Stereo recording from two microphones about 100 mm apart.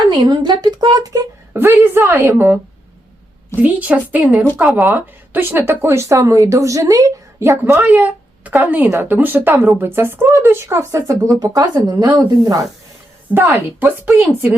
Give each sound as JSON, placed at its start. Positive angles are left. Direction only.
{"t": 0.1, "sound": "a woman's voice", "side_deg": -50}
{"t": 1.5, "sound": "a woman's voice", "side_deg": -25}
{"t": 13.3, "sound": "speech", "side_deg": -25}